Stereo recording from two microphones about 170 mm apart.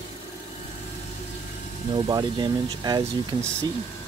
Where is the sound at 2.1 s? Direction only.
25° right (ahead or behind).